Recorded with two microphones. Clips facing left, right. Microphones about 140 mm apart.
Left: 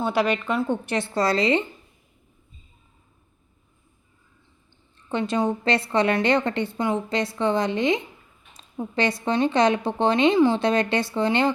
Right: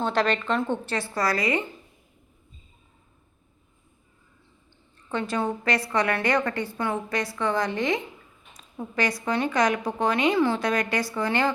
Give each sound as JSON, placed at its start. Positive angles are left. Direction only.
{"t": 0.0, "sound": "a woman's voice", "side_deg": 10}
{"t": 0.9, "sound": "a woman's voice", "side_deg": 25}
{"t": 5.0, "sound": "a woman's voice", "side_deg": 20}